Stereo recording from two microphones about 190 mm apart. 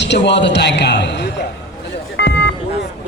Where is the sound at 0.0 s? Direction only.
65° left (ahead or behind).